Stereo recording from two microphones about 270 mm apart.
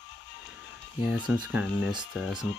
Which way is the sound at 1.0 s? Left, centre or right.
Centre.